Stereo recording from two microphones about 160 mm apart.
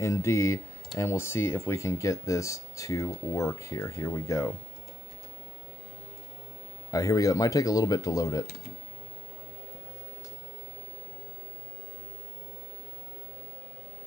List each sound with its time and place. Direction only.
0.0 s speech: 20° left (ahead or behind)
6.9 s speech: 20° left (ahead or behind)